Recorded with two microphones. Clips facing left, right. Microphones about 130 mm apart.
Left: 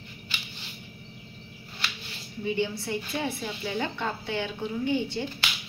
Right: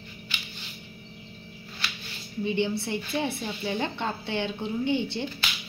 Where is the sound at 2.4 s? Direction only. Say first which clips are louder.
Right 2 dB; 25° right (ahead or behind).